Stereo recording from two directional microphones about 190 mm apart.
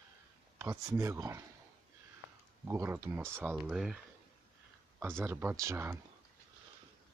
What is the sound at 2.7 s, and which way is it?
Speech, 10° right (ahead or behind).